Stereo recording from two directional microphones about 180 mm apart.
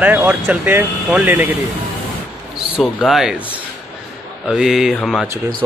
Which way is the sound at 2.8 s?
Centre (ahead or behind).